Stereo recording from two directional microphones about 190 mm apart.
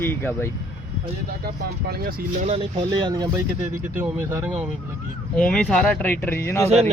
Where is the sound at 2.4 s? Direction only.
30° right (ahead or behind); by 4.5 s 10° right (ahead or behind).